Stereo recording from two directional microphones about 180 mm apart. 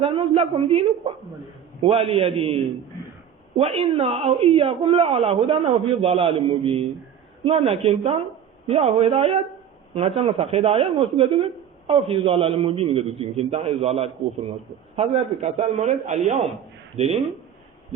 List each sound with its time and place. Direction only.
0.0 s speech: 30° right (ahead or behind)